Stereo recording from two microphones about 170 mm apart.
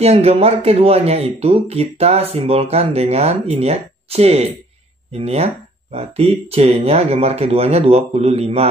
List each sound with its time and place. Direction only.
0.0 s speech: 40° right (ahead or behind)